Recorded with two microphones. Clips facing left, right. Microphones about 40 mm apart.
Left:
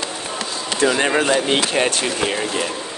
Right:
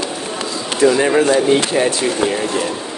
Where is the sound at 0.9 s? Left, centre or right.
Centre.